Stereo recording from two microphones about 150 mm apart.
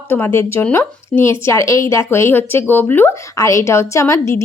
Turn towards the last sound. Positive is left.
turn(degrees=20)  # may be behind; listen again after turning